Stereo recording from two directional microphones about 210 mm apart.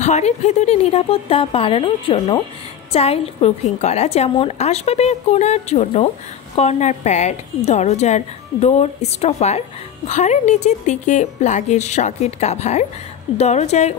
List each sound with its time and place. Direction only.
0.0 s a woman's voice: 35° left (ahead or behind)